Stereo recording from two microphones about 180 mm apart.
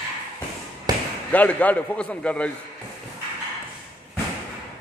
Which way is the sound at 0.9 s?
20° right (ahead or behind).